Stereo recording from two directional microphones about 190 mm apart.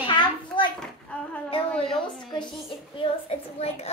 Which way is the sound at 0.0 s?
25° left (ahead or behind).